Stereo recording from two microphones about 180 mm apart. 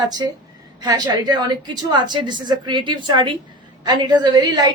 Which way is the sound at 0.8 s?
20° right (ahead or behind).